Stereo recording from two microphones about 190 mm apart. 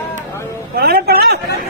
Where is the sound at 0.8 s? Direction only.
55° right (ahead or behind).